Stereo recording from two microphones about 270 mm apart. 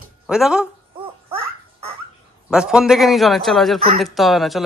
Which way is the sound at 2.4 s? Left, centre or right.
Centre.